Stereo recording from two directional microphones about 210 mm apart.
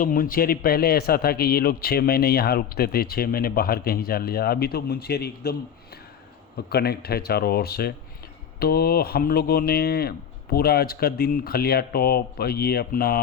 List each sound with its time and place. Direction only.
0.0 s a man's voice: 45° left (ahead or behind)
6.7 s a man's voice: 50° left (ahead or behind)